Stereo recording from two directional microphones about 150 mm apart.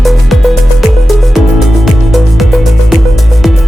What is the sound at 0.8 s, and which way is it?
Music, centre (ahead or behind).